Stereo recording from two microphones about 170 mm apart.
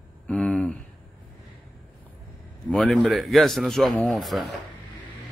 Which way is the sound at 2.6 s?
5° left (ahead or behind).